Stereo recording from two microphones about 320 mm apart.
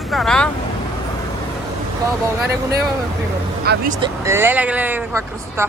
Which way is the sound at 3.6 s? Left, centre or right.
Right.